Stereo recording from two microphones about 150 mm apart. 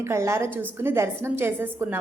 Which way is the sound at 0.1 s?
20° right (ahead or behind).